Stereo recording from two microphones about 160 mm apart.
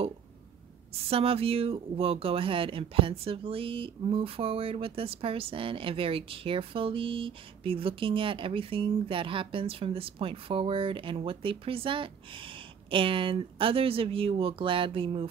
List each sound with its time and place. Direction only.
1.1 s speech: 35° right (ahead or behind)